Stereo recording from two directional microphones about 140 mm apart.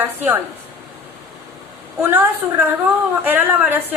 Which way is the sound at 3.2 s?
15° right (ahead or behind).